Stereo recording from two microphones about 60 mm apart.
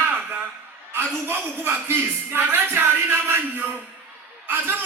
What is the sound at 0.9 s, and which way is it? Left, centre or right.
A man's voice, right.